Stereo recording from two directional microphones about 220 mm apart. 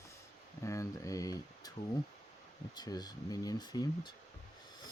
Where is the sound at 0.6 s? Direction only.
15° left (ahead or behind).